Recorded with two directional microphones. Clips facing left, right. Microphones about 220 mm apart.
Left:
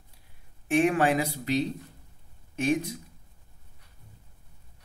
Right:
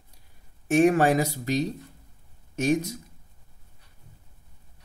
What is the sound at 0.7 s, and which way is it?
Speech, 40° right (ahead or behind).